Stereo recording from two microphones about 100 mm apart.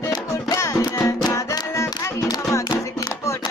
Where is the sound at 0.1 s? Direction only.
30° left (ahead or behind).